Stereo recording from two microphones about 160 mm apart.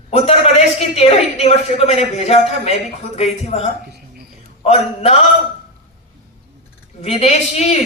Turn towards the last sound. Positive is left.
turn(degrees=45)  # may be behind; listen again after turning